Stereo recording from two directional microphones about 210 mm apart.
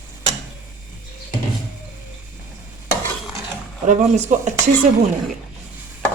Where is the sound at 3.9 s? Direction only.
35° right (ahead or behind).